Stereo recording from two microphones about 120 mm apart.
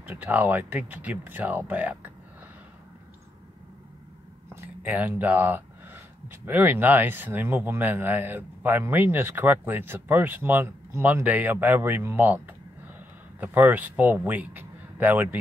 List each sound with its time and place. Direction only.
0.0 s speech: 15° right (ahead or behind)
4.6 s speech: 15° right (ahead or behind)
13.4 s speech: 15° right (ahead or behind)